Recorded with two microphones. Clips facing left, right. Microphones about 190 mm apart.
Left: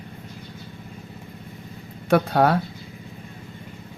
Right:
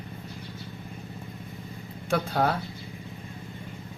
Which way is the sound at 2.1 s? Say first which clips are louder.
Left 7 dB; 70° left (ahead or behind).